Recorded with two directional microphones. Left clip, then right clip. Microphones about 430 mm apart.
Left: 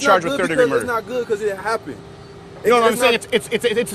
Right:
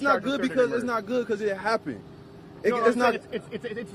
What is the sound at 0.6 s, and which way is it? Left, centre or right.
Speech, right.